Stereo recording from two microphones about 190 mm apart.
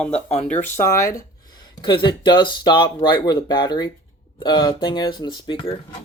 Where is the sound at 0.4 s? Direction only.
10° left (ahead or behind); by 5.7 s 25° left (ahead or behind).